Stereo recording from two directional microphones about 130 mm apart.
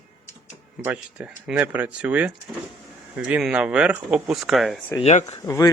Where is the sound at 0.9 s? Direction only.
10° right (ahead or behind).